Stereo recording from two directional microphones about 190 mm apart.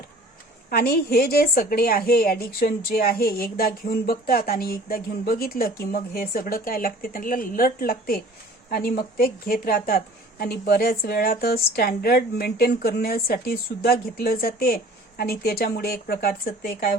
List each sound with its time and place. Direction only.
0.7 s a woman's voice: 55° left (ahead or behind)